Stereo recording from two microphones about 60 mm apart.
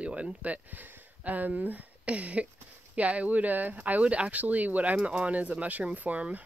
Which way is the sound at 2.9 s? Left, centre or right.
Right.